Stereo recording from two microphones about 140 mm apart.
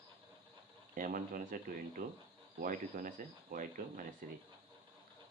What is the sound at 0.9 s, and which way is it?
Speech, 80° right.